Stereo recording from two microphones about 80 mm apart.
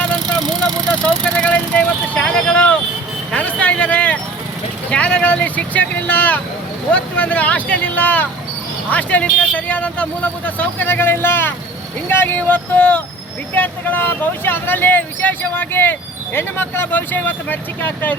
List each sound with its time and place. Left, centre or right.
0.9 s vehicle: centre
3.3 s a sound: centre
4.9 s speech: centre